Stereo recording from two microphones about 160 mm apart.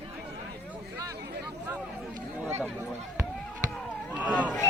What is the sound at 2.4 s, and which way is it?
Chatter, 15° right (ahead or behind).